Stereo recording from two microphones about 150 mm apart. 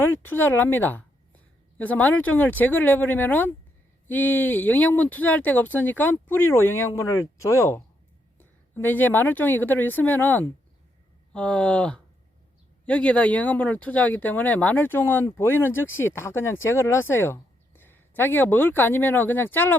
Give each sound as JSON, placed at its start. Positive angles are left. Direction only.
{"t": 0.0, "sound": "a woman's voice", "side_deg": 15}